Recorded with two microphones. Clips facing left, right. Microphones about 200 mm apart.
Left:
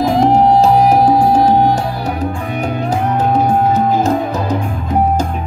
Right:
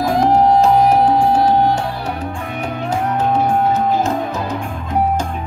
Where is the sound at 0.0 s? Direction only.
25° left (ahead or behind).